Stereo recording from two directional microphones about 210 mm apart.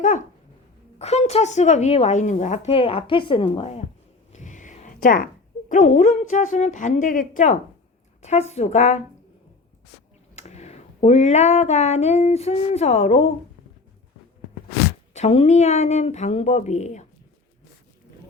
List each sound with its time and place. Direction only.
0.0 s dog: 35° left (ahead or behind)
0.9 s a woman's voice: 30° left (ahead or behind)
10.3 s a sound: 30° left (ahead or behind)
15.1 s a woman's voice: 30° left (ahead or behind)